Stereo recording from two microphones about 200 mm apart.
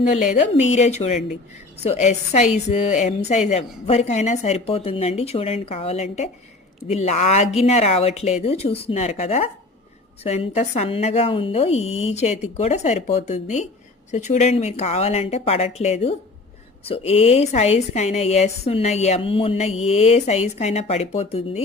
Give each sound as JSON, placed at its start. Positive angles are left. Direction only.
{"t": 0.1, "sound": "a woman's voice", "side_deg": 35}